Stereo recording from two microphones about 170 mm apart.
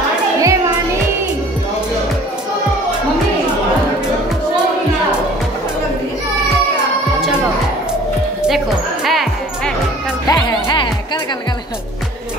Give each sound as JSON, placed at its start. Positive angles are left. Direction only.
{"t": 0.4, "sound": "music", "side_deg": -20}
{"t": 9.0, "sound": "music", "side_deg": 0}
{"t": 10.2, "sound": "music", "side_deg": 25}